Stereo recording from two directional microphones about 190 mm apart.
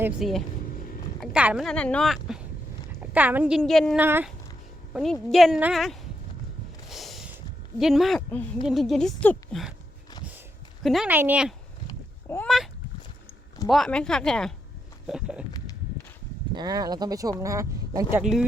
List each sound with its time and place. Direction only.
0.0 s a woman's voice: centre (ahead or behind)
1.6 s a woman's voice: 5° left (ahead or behind)
4.0 s a woman's voice: 10° right (ahead or behind)
5.3 s speech: centre (ahead or behind)
6.8 s a sound: centre (ahead or behind)
7.8 s speech: centre (ahead or behind)
10.8 s speech: 5° right (ahead or behind)
12.3 s speech: 10° left (ahead or behind)
13.7 s speech: centre (ahead or behind)
15.0 s a sound: 5° right (ahead or behind)
16.6 s a woman's voice: 20° right (ahead or behind)
18.2 s speech: centre (ahead or behind)